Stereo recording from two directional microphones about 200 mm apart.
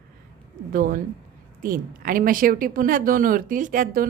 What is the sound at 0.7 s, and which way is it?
Speech, 45° right (ahead or behind).